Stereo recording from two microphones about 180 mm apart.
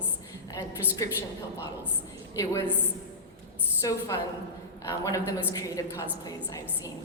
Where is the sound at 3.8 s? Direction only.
20° left (ahead or behind).